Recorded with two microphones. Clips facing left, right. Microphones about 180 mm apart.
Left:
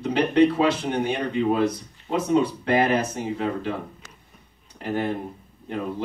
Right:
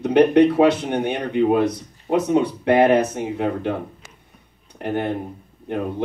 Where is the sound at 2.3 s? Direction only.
60° right (ahead or behind).